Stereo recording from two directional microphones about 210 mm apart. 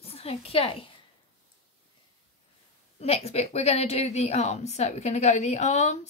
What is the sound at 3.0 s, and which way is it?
A woman's voice, 30° left (ahead or behind).